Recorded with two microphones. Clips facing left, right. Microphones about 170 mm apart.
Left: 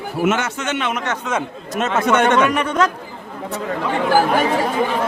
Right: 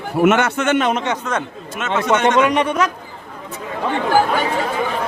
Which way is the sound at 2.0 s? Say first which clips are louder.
Even; 55° left (ahead or behind).